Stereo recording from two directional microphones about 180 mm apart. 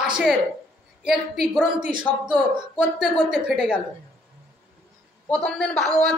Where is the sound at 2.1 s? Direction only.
5° left (ahead or behind).